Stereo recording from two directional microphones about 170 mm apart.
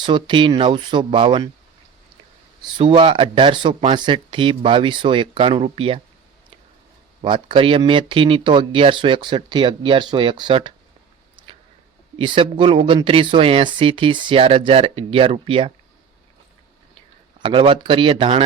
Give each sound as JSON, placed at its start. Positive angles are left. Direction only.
{"t": 0.0, "sound": "speech", "side_deg": -30}
{"t": 2.6, "sound": "speech", "side_deg": -30}
{"t": 7.2, "sound": "speech", "side_deg": -30}
{"t": 12.1, "sound": "speech", "side_deg": -30}
{"t": 17.4, "sound": "speech", "side_deg": -30}